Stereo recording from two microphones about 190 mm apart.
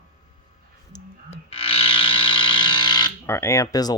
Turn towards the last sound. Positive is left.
turn(degrees=20)  # may be behind; listen again after turning